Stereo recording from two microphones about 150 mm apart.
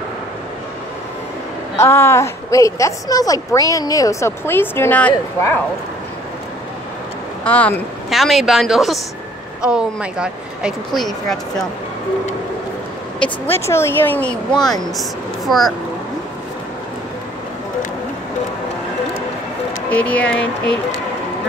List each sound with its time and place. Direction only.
1.8 s a woman's voice: 15° left (ahead or behind)
7.4 s speech: 10° left (ahead or behind)
13.2 s speech: 15° left (ahead or behind)
14.6 s speech: centre (ahead or behind)
19.9 s speech: 10° left (ahead or behind)